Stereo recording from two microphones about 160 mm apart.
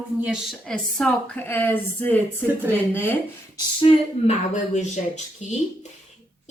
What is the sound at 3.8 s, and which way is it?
Speech, 45° left (ahead or behind).